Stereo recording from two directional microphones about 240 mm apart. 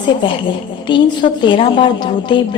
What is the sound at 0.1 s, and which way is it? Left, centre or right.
A woman's voice, centre.